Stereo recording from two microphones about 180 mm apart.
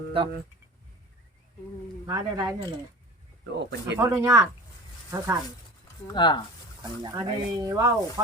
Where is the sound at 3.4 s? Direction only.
70° right (ahead or behind).